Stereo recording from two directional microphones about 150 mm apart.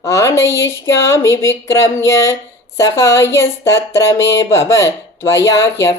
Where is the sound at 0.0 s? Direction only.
20° left (ahead or behind).